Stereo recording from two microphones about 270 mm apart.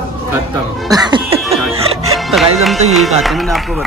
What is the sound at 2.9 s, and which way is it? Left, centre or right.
Speech, centre.